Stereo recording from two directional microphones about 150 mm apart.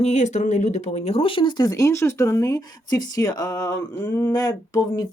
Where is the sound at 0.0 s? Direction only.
50° left (ahead or behind).